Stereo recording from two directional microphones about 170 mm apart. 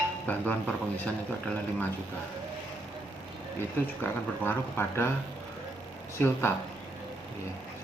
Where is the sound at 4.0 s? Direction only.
10° left (ahead or behind).